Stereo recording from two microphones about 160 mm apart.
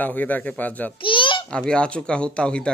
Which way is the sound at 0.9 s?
30° left (ahead or behind).